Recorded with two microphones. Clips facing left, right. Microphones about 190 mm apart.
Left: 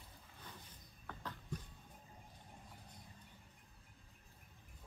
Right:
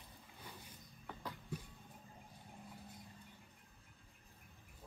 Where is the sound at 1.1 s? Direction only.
10° right (ahead or behind).